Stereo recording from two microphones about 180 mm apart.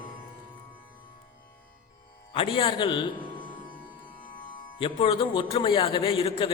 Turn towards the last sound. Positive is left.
turn(degrees=30)  # may be behind; listen again after turning